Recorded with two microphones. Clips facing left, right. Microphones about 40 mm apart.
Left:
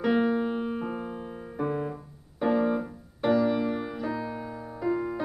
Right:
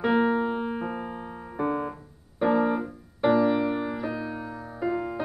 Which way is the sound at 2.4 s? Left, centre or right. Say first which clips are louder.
Right 2 dB; centre.